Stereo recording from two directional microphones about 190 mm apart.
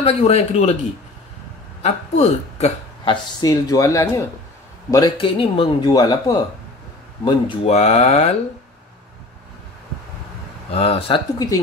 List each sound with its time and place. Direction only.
0.0 s speech: 35° left (ahead or behind)
1.8 s a man's voice: 35° left (ahead or behind)
3.3 s a man's voice: 20° left (ahead or behind); by 8.3 s 35° left (ahead or behind)
10.7 s a man's voice: 30° left (ahead or behind)